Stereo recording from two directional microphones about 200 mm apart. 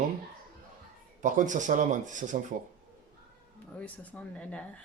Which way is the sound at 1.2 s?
40° right (ahead or behind).